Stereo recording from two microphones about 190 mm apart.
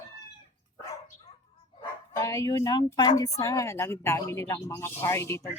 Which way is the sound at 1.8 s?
20° left (ahead or behind).